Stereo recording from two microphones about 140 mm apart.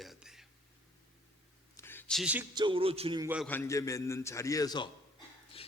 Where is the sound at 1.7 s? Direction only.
15° left (ahead or behind).